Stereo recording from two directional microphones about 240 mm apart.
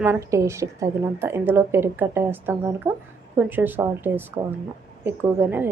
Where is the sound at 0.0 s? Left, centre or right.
Centre.